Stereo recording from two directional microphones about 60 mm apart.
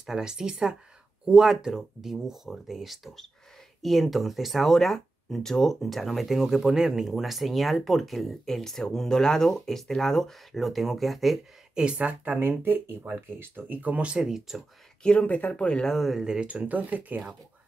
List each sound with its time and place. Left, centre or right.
0.0 s speech: centre
11.7 s speech: centre
12.4 s speech: right; by 14.2 s centre
14.2 s speech: centre
15.0 s speech: left
15.9 s speech: centre
16.2 s speech: centre
16.4 s speech: right